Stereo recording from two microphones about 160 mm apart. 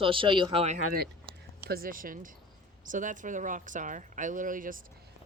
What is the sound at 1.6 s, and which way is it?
A woman's voice, 70° right (ahead or behind).